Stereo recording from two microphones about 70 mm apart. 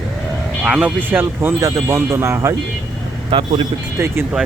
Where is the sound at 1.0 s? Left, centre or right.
Right.